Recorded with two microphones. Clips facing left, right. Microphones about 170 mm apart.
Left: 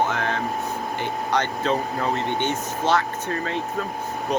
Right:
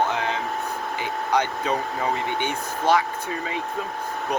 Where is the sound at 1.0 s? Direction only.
10° right (ahead or behind).